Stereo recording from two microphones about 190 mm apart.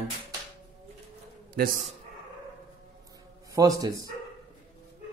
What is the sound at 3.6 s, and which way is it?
Speech, 20° right (ahead or behind).